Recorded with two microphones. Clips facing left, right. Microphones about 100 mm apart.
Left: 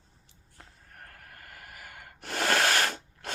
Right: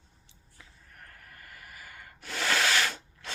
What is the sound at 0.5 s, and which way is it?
Snort, 55° left (ahead or behind).